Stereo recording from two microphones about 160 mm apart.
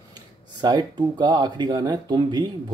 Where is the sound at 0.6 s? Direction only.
25° right (ahead or behind).